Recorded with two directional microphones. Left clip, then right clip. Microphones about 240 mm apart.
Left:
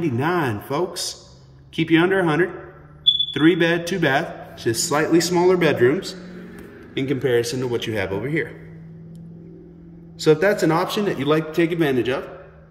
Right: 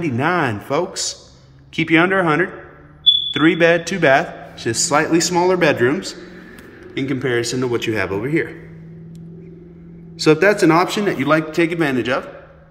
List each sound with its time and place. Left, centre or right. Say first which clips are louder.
0.0 s a man's voice: right 3 dB; centre
10.4 s speech: right 5 dB; right
10.7 s a man's voice: right 5 dB; centre